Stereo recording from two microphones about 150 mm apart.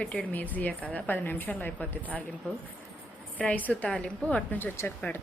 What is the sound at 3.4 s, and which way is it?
A woman's voice, 10° left (ahead or behind).